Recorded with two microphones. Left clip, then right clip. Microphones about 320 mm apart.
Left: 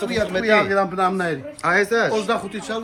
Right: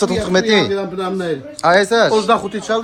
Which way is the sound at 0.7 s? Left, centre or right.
Centre.